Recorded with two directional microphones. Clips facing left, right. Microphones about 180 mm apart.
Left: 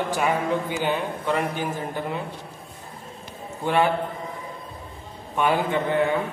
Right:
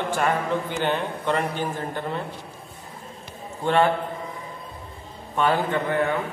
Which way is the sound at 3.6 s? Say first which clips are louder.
Right 1 dB; 10° left (ahead or behind).